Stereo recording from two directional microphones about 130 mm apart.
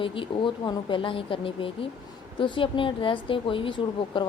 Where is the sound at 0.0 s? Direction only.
40° left (ahead or behind).